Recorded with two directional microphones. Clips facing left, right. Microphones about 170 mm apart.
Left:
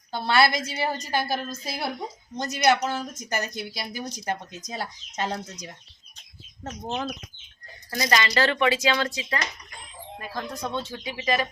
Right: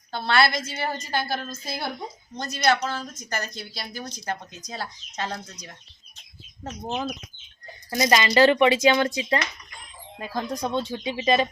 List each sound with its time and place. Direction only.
0.1 s speech: 10° left (ahead or behind)
6.7 s speech: 5° right (ahead or behind)
7.9 s speech: 20° right (ahead or behind)